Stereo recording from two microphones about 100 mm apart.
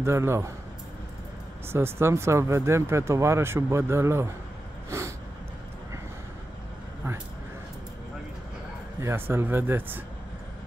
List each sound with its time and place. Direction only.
0.0 s speech: 25° right (ahead or behind)
1.7 s speech: 25° right (ahead or behind)
4.8 s a sound: 30° right (ahead or behind)
9.0 s speech: 25° right (ahead or behind)